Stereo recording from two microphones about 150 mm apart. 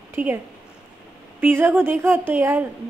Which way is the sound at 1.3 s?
15° right (ahead or behind).